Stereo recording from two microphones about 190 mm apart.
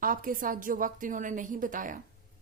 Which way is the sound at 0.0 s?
45° right (ahead or behind).